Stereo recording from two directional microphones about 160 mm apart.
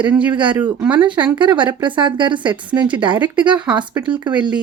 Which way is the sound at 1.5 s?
30° right (ahead or behind).